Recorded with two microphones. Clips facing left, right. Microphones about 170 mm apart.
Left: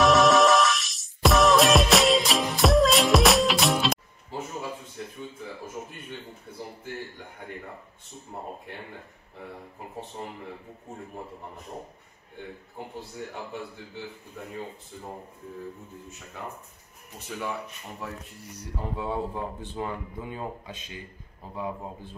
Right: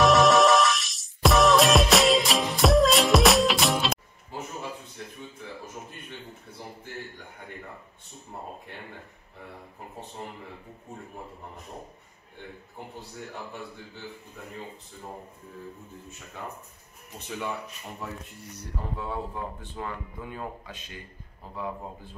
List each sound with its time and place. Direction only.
0.0 s music: centre (ahead or behind)
17.3 s speech: 5° left (ahead or behind)
18.9 s a man's voice: 20° left (ahead or behind)